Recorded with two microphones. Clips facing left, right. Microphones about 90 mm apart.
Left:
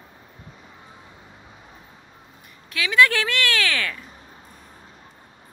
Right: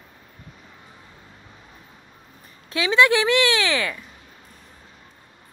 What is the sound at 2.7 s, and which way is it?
A woman's voice, 25° right (ahead or behind).